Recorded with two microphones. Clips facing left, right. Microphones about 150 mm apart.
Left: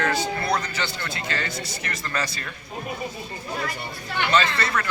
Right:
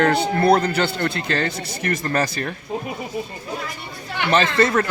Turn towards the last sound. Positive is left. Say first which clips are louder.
# right 5 dB
turn(degrees=-45)  # may be behind; listen again after turning